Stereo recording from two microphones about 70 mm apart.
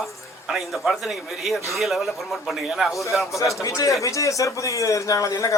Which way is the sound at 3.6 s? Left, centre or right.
Left.